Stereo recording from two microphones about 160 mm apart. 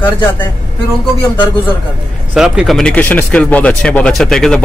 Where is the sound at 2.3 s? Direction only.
5° right (ahead or behind).